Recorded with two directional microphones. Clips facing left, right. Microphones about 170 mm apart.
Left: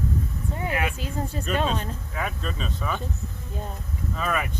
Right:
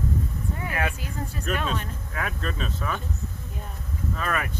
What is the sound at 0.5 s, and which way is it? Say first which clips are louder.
Speech: left 3 dB; 25° left (ahead or behind).